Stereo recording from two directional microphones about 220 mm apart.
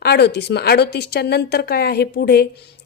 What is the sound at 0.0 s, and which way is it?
A woman's voice, 50° left (ahead or behind).